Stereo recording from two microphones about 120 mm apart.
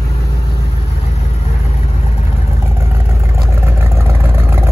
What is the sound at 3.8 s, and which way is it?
Vehicle, 20° right (ahead or behind).